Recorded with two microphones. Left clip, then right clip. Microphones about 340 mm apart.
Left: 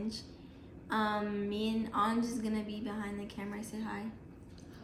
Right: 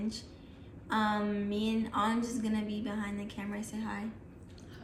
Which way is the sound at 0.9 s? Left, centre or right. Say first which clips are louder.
Right 2 dB; centre.